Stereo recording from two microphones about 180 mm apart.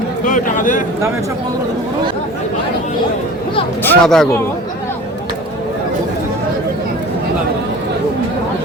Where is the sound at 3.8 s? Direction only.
5° left (ahead or behind).